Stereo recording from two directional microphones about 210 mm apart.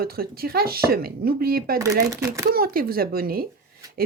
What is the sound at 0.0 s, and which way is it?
Speech, 45° right (ahead or behind).